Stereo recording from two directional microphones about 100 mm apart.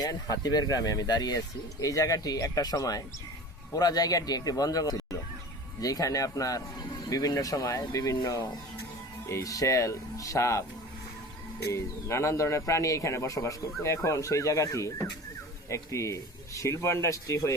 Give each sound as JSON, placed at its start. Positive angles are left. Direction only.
{"t": 0.0, "sound": "a man's voice", "side_deg": 40}
{"t": 11.7, "sound": "a man's voice", "side_deg": 30}